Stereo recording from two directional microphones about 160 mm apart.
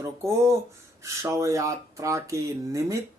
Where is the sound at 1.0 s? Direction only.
20° right (ahead or behind).